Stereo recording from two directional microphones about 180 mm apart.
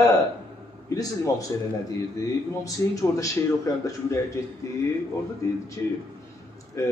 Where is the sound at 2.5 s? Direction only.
20° left (ahead or behind).